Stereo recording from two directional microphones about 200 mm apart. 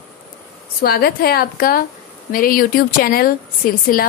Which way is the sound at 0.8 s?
50° left (ahead or behind).